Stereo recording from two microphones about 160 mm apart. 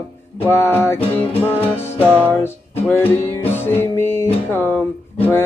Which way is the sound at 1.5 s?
10° left (ahead or behind).